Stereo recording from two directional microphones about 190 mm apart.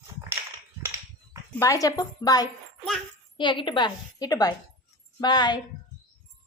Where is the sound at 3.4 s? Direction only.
25° left (ahead or behind).